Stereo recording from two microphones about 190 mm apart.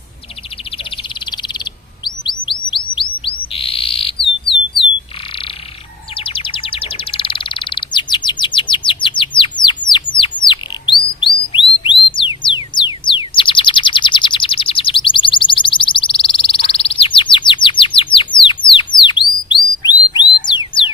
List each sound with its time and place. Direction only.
2.2 s chirp: 25° left (ahead or behind)
2.6 s bird: 25° left (ahead or behind)
6.1 s bird: 30° left (ahead or behind)
11.8 s music: 25° left (ahead or behind)
12.7 s a sound: 25° left (ahead or behind)
20.5 s music: 25° left (ahead or behind)